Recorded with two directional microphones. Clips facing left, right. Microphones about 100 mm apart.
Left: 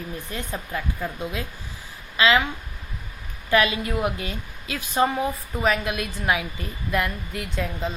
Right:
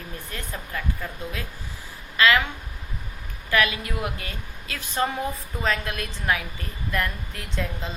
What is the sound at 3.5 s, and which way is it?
A woman's voice, 25° left (ahead or behind).